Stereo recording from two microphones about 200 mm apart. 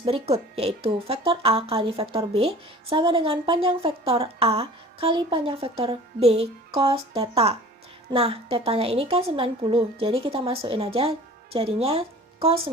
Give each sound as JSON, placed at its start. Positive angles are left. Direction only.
{"t": 0.0, "sound": "a woman's voice", "side_deg": -30}